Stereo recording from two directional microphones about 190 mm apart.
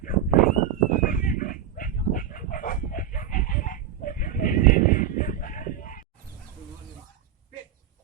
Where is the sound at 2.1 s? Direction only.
45° left (ahead or behind).